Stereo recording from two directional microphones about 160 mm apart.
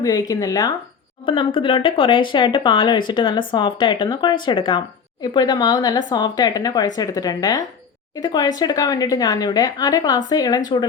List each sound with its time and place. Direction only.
0.0 s speech: 25° left (ahead or behind)
1.2 s speech: 30° left (ahead or behind)